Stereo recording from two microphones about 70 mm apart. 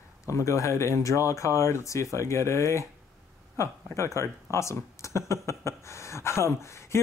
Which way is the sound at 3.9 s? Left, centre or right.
Left.